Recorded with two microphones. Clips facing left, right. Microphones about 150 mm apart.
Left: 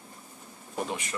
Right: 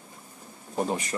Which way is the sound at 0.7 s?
35° right (ahead or behind).